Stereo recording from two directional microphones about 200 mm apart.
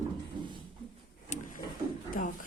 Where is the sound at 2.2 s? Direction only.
45° left (ahead or behind).